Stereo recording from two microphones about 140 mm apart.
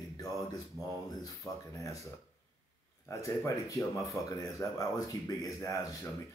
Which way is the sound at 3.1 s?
20° left (ahead or behind).